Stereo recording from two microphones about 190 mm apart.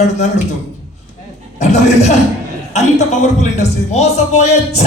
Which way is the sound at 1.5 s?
35° left (ahead or behind).